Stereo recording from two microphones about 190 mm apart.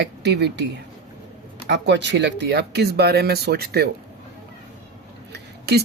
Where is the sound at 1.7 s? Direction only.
65° right (ahead or behind).